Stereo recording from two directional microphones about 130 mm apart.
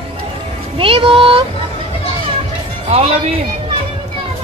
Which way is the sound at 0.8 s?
45° right (ahead or behind).